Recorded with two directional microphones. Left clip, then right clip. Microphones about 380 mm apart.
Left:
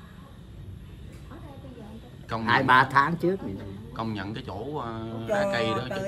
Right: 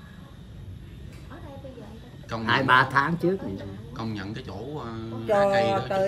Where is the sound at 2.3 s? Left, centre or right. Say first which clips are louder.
Even; centre.